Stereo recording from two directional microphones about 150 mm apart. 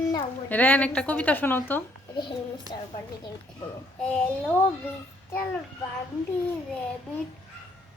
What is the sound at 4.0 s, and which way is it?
Speech, 10° left (ahead or behind).